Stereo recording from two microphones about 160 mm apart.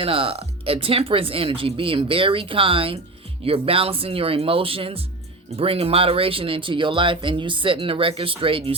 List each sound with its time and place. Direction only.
0.0 s speech: 35° right (ahead or behind)